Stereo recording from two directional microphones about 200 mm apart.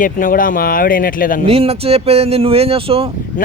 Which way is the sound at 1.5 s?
30° right (ahead or behind).